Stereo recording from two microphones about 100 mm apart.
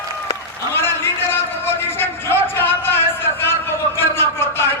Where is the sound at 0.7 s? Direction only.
25° left (ahead or behind).